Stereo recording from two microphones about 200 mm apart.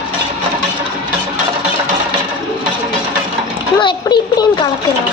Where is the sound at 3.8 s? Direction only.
25° left (ahead or behind).